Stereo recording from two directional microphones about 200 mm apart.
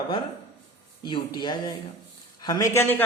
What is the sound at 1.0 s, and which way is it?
A man's voice, 20° left (ahead or behind).